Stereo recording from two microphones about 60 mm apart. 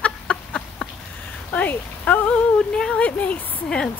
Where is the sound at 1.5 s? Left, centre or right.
Left.